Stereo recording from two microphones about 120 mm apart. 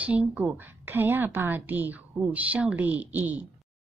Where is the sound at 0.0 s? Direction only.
10° right (ahead or behind).